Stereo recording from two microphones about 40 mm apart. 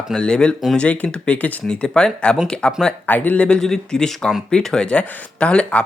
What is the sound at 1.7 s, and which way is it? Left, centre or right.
Speech, left.